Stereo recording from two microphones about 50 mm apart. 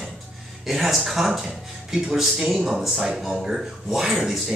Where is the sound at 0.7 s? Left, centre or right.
Centre.